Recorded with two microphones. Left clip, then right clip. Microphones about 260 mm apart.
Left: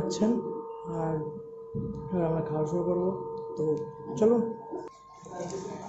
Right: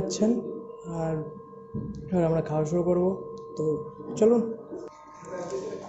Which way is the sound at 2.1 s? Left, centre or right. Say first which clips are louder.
Right 4 dB; centre.